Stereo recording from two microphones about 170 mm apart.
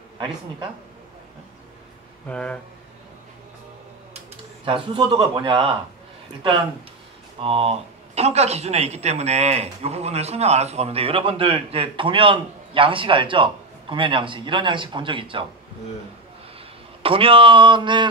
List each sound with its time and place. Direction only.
2.2 s speech: 5° left (ahead or behind)
4.6 s a man's voice: 30° right (ahead or behind)
7.4 s speech: 35° right (ahead or behind)
17.0 s a man's voice: 30° right (ahead or behind)